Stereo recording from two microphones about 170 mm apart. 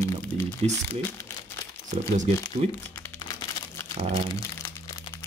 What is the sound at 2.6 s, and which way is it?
Speech, 35° right (ahead or behind).